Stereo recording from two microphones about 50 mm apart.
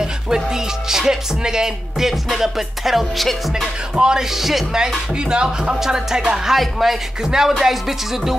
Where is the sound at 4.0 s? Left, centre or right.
Centre.